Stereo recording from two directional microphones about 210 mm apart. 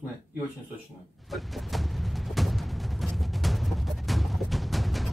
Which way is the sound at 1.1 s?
Centre (ahead or behind).